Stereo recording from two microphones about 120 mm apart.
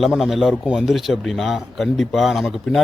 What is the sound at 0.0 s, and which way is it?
Speech, centre (ahead or behind).